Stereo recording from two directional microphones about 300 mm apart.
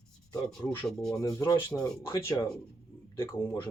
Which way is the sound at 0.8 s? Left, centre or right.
Centre.